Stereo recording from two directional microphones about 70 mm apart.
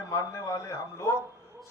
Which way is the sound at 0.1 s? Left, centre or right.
Left.